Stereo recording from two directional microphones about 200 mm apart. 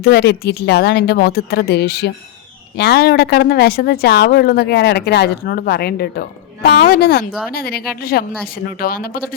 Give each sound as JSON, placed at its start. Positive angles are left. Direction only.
{"t": 0.0, "sound": "a woman's voice", "side_deg": 50}